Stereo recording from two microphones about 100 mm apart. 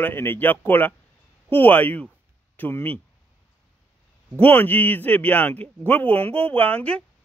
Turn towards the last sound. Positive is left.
turn(degrees=15)  # may be behind; listen again after turning